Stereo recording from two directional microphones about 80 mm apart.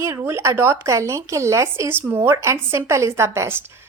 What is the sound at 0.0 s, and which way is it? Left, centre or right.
A woman's voice, right.